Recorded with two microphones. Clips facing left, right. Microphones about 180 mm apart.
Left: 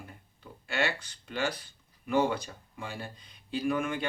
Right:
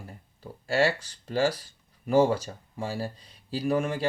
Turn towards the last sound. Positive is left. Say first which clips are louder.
# right 3 dB
turn(degrees=-35)  # may be behind; listen again after turning